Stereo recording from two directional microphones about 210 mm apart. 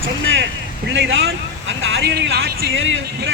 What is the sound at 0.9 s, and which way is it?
Speech, 60° right (ahead or behind).